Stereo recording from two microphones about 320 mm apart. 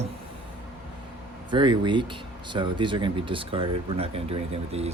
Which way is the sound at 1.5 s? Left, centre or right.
Centre.